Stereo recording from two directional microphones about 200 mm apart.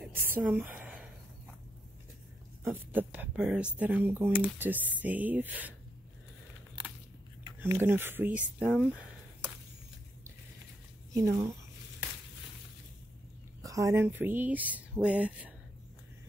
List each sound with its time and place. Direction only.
0.0 s a sound: 10° right (ahead or behind)
2.6 s speech: 10° right (ahead or behind)
7.8 s speech: 10° right (ahead or behind)
11.1 s speech: 15° right (ahead or behind)
13.6 s speech: 15° right (ahead or behind)